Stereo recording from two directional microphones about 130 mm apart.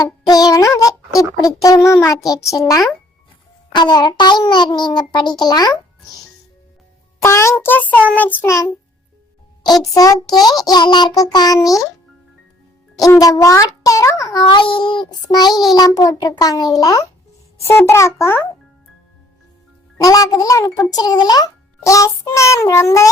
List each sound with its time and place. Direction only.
0.0 s child singing: 30° left (ahead or behind)
3.8 s a child's voice: 35° left (ahead or behind)
7.2 s a child's voice: 20° left (ahead or behind)
7.6 s child singing: 15° left (ahead or behind)
10.6 s a child's voice: 35° left (ahead or behind)
13.0 s child singing: 25° left (ahead or behind)
14.5 s a child's voice: 40° left (ahead or behind)
15.7 s child singing: 30° left (ahead or behind)
20.0 s child singing: 25° left (ahead or behind)